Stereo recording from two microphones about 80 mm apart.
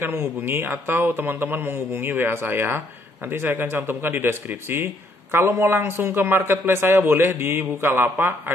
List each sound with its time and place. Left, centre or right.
0.0 s a man's voice: right